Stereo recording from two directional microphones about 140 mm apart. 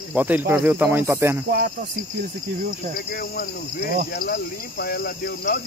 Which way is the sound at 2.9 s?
90° left.